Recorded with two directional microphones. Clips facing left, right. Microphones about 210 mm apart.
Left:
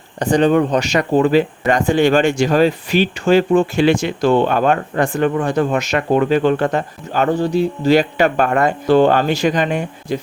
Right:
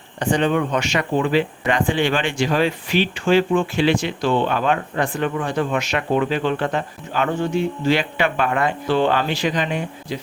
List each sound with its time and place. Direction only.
0.2 s speech: 40° left (ahead or behind)